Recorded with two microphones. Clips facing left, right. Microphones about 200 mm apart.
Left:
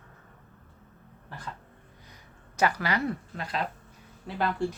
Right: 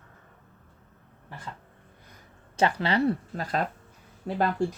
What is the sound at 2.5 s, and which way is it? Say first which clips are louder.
Speech: right 2 dB; 30° right (ahead or behind).